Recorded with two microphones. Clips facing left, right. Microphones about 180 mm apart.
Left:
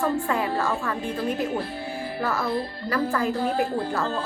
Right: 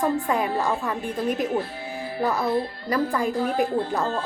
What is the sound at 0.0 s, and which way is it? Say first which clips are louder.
A woman's voice: right 1 dB; 15° right (ahead or behind).